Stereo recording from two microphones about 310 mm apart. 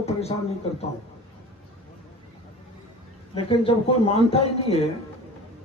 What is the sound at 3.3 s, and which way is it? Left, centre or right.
A man's voice, centre.